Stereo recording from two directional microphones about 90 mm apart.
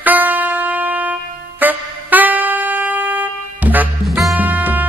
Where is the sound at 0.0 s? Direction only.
20° right (ahead or behind).